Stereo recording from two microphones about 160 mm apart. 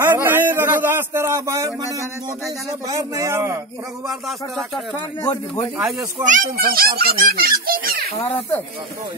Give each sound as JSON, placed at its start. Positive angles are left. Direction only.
{"t": 0.0, "sound": "speech", "side_deg": -15}
{"t": 4.1, "sound": "speech", "side_deg": 0}
{"t": 5.9, "sound": "speech", "side_deg": -20}
{"t": 6.2, "sound": "a child's voice", "side_deg": -60}